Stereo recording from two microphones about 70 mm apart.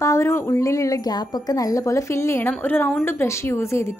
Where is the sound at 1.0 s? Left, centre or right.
Left.